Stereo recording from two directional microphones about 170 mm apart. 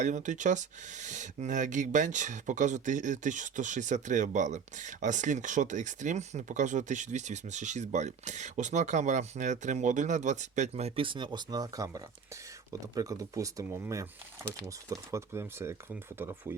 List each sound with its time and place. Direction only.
0.0 s speech: 45° right (ahead or behind); by 16.6 s 15° right (ahead or behind)